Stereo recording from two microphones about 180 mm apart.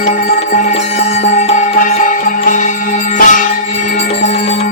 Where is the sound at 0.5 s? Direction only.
40° left (ahead or behind).